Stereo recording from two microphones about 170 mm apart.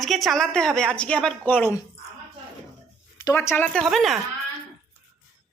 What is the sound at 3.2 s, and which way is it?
Speech, 15° left (ahead or behind).